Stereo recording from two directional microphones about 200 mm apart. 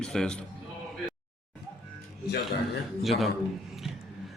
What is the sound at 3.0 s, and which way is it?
Speech, centre (ahead or behind).